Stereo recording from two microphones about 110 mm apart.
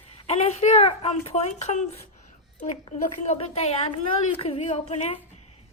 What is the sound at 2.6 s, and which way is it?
A woman's voice, 70° left (ahead or behind).